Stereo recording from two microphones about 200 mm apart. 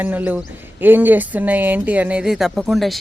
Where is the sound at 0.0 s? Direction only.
10° right (ahead or behind).